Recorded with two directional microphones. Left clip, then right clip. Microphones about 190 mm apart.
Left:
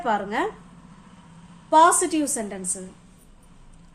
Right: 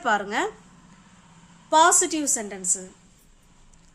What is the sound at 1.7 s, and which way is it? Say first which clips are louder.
A woman's voice: left 2 dB; 20° right (ahead or behind).